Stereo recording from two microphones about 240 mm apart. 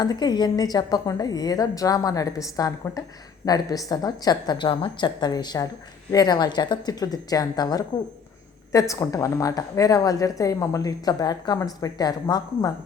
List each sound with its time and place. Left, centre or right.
0.0 s a woman's voice: centre